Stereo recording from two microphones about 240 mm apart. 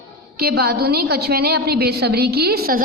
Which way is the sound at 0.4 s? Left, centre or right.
Right.